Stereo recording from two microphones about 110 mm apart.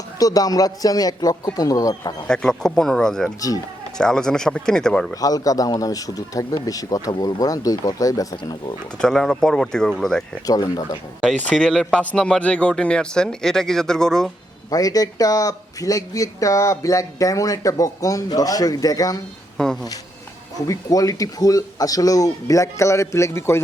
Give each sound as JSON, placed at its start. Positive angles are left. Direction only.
{"t": 0.2, "sound": "speech", "side_deg": 35}
{"t": 2.2, "sound": "speech", "side_deg": 5}
{"t": 5.1, "sound": "speech", "side_deg": 35}
{"t": 9.0, "sound": "speech", "side_deg": 5}
{"t": 10.4, "sound": "speech", "side_deg": 35}
{"t": 11.5, "sound": "a man's voice", "side_deg": 5}
{"t": 14.7, "sound": "speech", "side_deg": 35}
{"t": 19.5, "sound": "speech", "side_deg": 5}
{"t": 20.7, "sound": "speech", "side_deg": 35}